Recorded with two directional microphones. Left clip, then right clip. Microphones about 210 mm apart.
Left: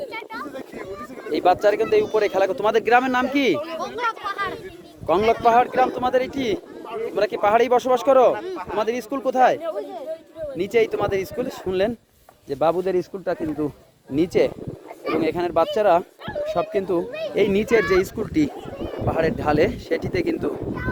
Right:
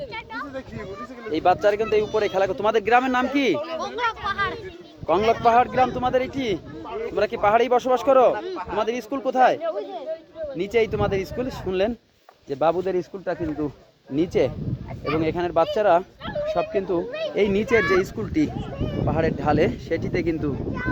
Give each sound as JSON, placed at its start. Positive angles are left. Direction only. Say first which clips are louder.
{"t": 1.3, "sound": "a man's voice", "louder": "left 1 dB", "side_deg": 20}
{"t": 3.8, "sound": "speech", "louder": "even", "side_deg": 0}
{"t": 5.0, "sound": "a man's voice", "louder": "left 1 dB", "side_deg": 20}
{"t": 10.6, "sound": "a man's voice", "louder": "left 2 dB", "side_deg": 15}
{"t": 17.1, "sound": "a sound", "louder": "right 1 dB", "side_deg": -10}
{"t": 17.3, "sound": "speech", "louder": "left 2 dB", "side_deg": 20}